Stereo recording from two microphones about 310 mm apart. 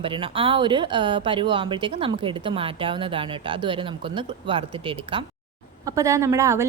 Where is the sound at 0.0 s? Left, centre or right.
Centre.